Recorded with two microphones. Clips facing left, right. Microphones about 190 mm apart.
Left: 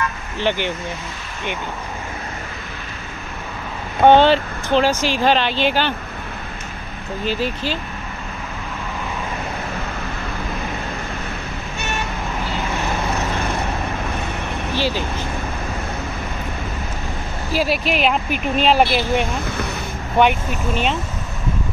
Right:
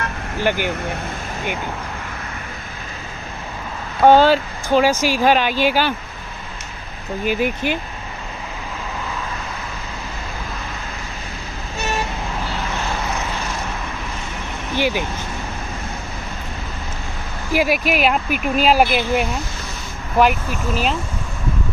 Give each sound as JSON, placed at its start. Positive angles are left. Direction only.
{"t": 0.4, "sound": "speech", "side_deg": -10}
{"t": 4.0, "sound": "speech", "side_deg": -5}
{"t": 7.2, "sound": "speech", "side_deg": -15}
{"t": 14.8, "sound": "speech", "side_deg": -15}
{"t": 17.5, "sound": "speech", "side_deg": -15}
{"t": 20.2, "sound": "speech", "side_deg": -5}